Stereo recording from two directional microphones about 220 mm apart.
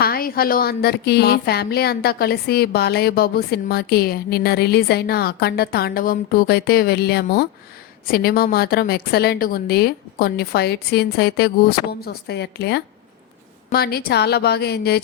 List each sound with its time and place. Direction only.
0.0 s speech: 45° left (ahead or behind)